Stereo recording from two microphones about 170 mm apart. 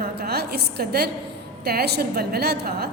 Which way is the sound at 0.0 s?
70° right (ahead or behind).